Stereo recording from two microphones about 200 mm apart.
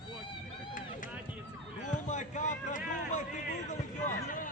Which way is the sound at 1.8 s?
40° left (ahead or behind).